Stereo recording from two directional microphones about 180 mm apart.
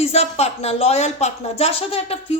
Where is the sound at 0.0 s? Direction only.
35° left (ahead or behind).